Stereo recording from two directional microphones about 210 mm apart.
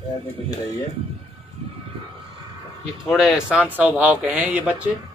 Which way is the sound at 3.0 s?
Centre (ahead or behind).